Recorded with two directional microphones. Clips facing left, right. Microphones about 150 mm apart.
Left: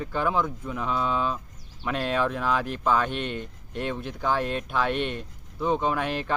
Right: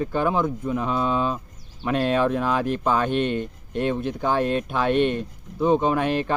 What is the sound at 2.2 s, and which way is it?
Speech, 15° right (ahead or behind).